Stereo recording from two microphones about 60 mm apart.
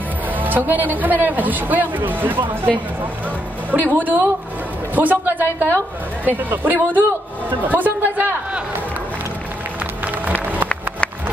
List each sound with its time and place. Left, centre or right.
0.4 s speech: right
3.9 s speech: right
10.2 s music: right